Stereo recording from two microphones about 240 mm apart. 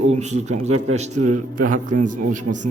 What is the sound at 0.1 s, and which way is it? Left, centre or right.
A man's voice, right.